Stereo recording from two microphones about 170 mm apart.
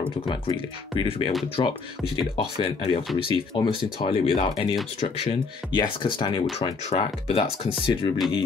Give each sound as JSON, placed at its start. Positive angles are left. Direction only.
{"t": 0.3, "sound": "speech", "side_deg": 30}